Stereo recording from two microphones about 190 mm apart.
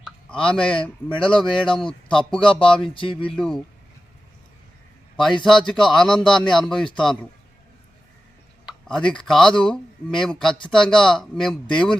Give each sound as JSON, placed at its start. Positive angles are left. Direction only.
{"t": 0.0, "sound": "a sound", "side_deg": 5}
{"t": 1.0, "sound": "speech", "side_deg": 5}
{"t": 2.4, "sound": "speech", "side_deg": 25}
{"t": 3.3, "sound": "speech", "side_deg": 0}
{"t": 5.4, "sound": "speech", "side_deg": 0}
{"t": 8.9, "sound": "speech", "side_deg": 5}